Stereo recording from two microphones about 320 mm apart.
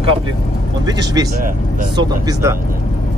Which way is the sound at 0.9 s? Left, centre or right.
Centre.